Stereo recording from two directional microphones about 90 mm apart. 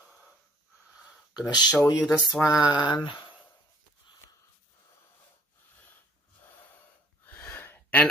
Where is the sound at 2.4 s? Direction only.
45° left (ahead or behind).